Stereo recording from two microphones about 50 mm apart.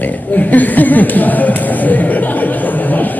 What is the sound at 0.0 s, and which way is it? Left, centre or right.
A man's voice, left.